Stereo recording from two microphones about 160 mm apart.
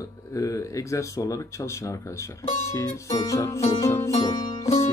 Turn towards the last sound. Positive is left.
turn(degrees=40)  # may be behind; listen again after turning